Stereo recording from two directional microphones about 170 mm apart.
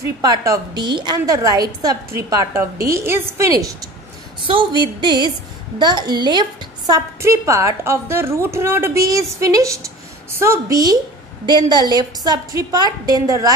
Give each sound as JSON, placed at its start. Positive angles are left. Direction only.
{"t": 0.0, "sound": "a woman's voice", "side_deg": -20}
{"t": 5.0, "sound": "a woman's voice", "side_deg": -25}